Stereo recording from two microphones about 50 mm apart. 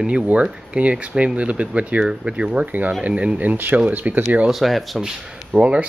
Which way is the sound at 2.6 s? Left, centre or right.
Right.